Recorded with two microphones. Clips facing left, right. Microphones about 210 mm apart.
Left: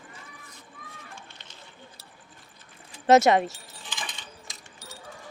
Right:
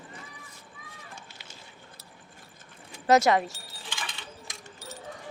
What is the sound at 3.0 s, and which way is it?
Speech, 25° left (ahead or behind).